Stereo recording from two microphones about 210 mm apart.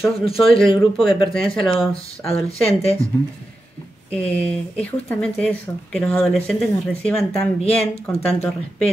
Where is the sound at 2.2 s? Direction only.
30° left (ahead or behind).